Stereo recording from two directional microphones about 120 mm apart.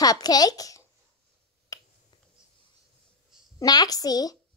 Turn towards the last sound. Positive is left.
turn(degrees=30)  # may be behind; listen again after turning